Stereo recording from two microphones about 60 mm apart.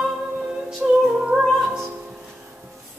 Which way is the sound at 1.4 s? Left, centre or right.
Centre.